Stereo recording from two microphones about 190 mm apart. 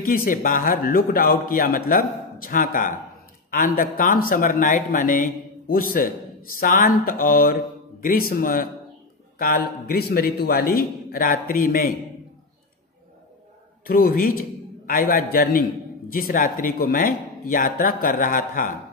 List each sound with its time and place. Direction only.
0.0 s speech: 50° left (ahead or behind)
13.8 s speech: 50° left (ahead or behind)